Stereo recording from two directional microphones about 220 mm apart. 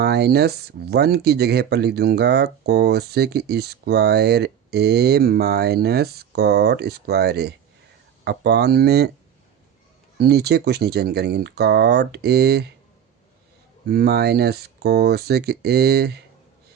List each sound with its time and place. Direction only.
0.0 s speech: 45° right (ahead or behind)
10.2 s speech: 45° right (ahead or behind)
13.8 s speech: 45° right (ahead or behind)